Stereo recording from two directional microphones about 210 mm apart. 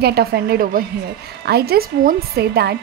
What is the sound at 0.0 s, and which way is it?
A woman's voice, 50° right (ahead or behind).